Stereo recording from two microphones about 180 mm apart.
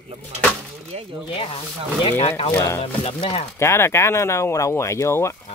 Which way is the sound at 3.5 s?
15° left (ahead or behind).